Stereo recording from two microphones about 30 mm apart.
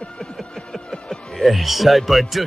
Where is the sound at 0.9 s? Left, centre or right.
Left.